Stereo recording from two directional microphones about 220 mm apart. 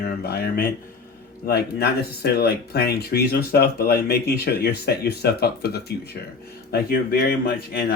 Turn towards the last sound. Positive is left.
turn(degrees=45)  # may be behind; listen again after turning